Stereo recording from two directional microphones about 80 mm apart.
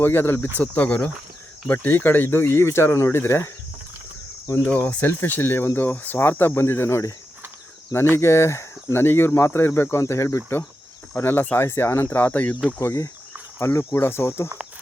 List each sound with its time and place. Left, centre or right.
0.0 s speech: left
4.9 s speech: left
12.8 s speech: left